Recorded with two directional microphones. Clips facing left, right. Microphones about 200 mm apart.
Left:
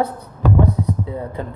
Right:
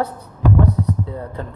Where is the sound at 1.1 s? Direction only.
10° left (ahead or behind).